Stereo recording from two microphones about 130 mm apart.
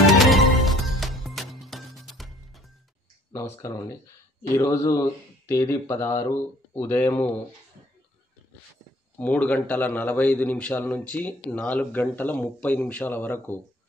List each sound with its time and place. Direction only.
0.0 s music: centre (ahead or behind)
4.4 s a man's voice: 25° left (ahead or behind)
9.2 s a man's voice: 10° left (ahead or behind)